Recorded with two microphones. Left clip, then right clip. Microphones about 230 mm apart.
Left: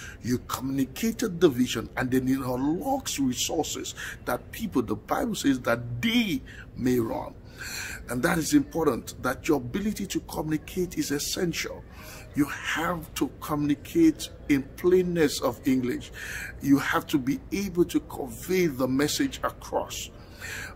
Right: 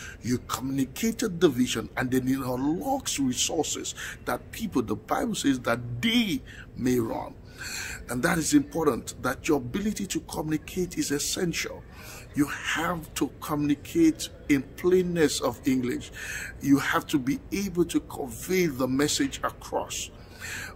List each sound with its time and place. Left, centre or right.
0.0 s a man's voice: centre